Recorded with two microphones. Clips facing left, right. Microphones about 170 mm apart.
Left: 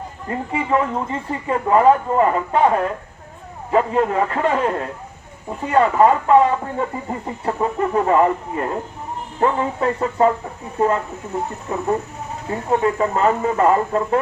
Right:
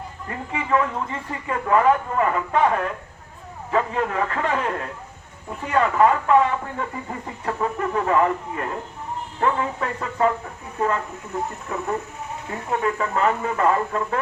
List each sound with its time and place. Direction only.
0.3 s speech: 30° left (ahead or behind)
5.7 s speech: 30° left (ahead or behind)